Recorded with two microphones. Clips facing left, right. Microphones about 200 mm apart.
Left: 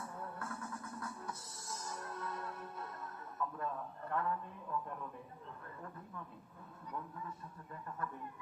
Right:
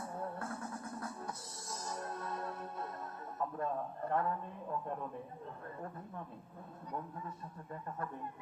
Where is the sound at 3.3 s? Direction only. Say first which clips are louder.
Right 4 dB; 35° right (ahead or behind).